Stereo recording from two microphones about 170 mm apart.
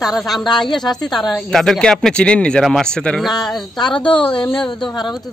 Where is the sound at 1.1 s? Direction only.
Centre (ahead or behind).